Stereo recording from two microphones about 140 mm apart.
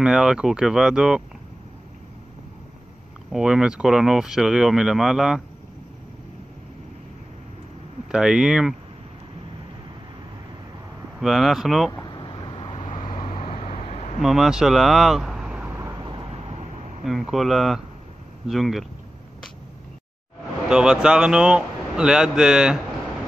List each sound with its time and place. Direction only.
0.0 s speech: 5° right (ahead or behind)
3.3 s speech: 5° right (ahead or behind)
8.1 s speech: 5° right (ahead or behind)
11.1 s speech: centre (ahead or behind)
11.9 s vehicle: 30° left (ahead or behind)
12.8 s vehicle: 65° left (ahead or behind)
13.1 s vehicle: 40° left (ahead or behind); by 14.1 s 55° left (ahead or behind)
14.2 s speech: centre (ahead or behind)
15.8 s vehicle: 30° right (ahead or behind); by 16.6 s 45° right (ahead or behind)
17.0 s speech: centre (ahead or behind)
20.6 s speech: 5° right (ahead or behind)